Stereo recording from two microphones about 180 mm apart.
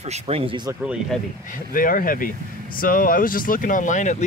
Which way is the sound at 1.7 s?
50° left (ahead or behind).